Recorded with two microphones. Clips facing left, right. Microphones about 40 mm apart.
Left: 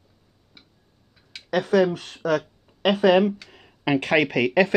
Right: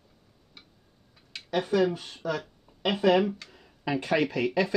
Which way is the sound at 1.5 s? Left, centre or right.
Left.